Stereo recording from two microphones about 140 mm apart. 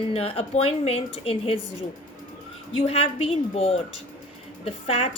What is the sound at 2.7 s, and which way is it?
A woman's voice, 45° left (ahead or behind).